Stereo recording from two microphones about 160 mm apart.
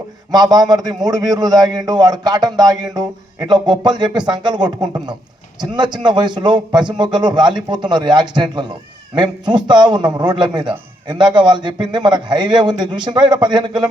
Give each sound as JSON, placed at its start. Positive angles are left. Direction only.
{"t": 0.3, "sound": "a man's voice", "side_deg": -25}